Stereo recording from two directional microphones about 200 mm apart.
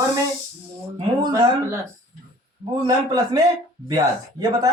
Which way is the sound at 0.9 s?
20° right (ahead or behind).